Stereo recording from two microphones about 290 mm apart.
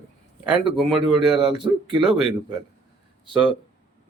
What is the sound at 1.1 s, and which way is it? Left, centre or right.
A man's voice, centre.